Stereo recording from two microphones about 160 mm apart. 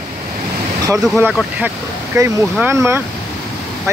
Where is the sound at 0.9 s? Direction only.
Centre (ahead or behind).